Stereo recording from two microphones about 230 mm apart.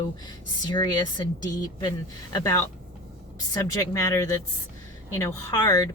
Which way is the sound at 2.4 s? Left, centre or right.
Centre.